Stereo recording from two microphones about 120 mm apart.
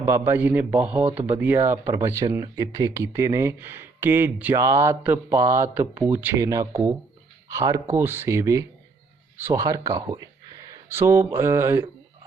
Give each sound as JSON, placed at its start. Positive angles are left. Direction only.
{"t": 0.0, "sound": "a man's voice", "side_deg": -20}
{"t": 6.4, "sound": "speech", "side_deg": -25}
{"t": 7.9, "sound": "speech", "side_deg": -20}